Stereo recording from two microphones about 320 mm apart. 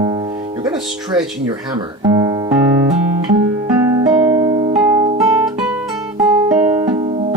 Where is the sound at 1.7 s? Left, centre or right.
Centre.